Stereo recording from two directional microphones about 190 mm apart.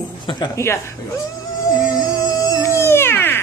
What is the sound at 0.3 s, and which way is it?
Speech, 20° left (ahead or behind).